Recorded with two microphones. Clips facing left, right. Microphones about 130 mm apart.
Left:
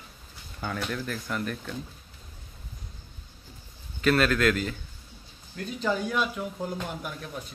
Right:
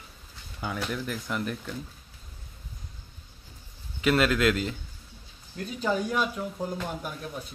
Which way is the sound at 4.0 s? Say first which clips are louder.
Even; 20° right (ahead or behind).